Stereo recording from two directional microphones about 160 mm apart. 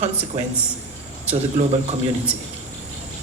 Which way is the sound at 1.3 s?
45° right (ahead or behind).